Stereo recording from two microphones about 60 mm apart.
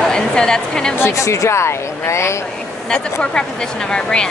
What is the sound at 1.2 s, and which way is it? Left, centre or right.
Speech, left.